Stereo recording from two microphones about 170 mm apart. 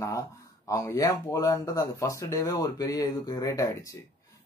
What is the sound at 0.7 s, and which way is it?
Speech, 20° left (ahead or behind).